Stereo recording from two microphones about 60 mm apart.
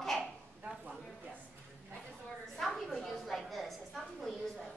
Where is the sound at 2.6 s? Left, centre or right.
Centre.